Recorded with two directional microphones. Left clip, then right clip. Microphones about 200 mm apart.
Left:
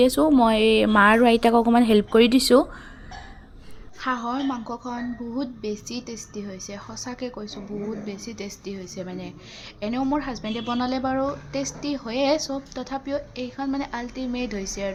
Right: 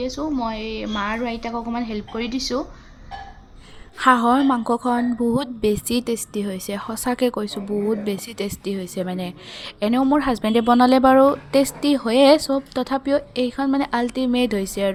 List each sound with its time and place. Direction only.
0.0 s speech: 35° left (ahead or behind)
3.9 s speech: 40° right (ahead or behind)